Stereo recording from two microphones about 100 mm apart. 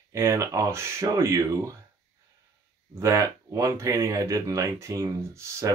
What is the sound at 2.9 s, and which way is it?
Speech, 30° right (ahead or behind).